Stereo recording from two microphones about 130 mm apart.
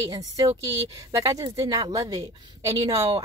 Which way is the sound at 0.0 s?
25° right (ahead or behind).